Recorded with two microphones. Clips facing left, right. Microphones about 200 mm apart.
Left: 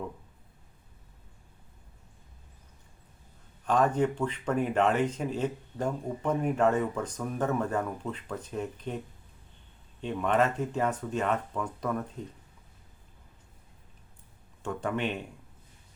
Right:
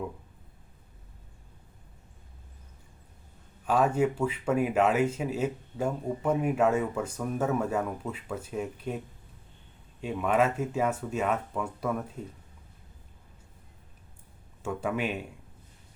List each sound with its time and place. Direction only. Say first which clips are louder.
3.7 s speech: right 1 dB; 5° right (ahead or behind)
10.0 s speech: right 1 dB; 5° right (ahead or behind)
14.6 s speech: right 1 dB; 5° right (ahead or behind)